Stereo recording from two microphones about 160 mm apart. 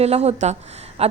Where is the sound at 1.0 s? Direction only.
40° right (ahead or behind).